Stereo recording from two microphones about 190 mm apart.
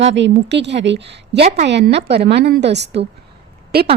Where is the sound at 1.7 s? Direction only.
65° right (ahead or behind).